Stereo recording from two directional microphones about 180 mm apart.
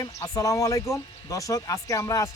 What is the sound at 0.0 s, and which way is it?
Speech, 20° left (ahead or behind).